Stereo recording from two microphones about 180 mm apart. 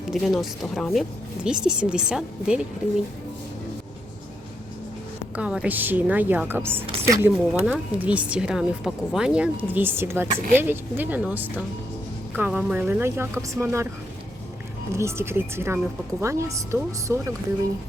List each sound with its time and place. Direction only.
0.1 s a woman's voice: centre (ahead or behind)
5.4 s a woman's voice: 5° right (ahead or behind)
14.9 s a woman's voice: 15° right (ahead or behind)